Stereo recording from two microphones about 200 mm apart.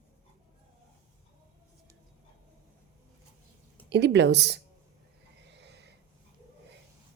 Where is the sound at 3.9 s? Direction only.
60° right (ahead or behind).